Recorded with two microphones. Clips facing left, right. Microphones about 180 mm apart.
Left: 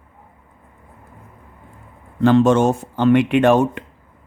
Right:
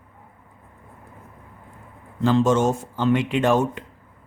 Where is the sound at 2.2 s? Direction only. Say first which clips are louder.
Left 5 dB; 65° left (ahead or behind).